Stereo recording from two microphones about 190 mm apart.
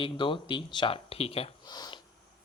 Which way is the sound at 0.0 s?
25° left (ahead or behind).